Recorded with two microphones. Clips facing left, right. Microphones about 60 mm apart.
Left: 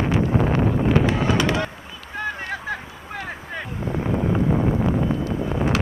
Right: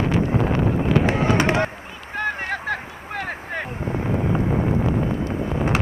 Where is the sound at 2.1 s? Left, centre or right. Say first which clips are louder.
Right 3 dB; right.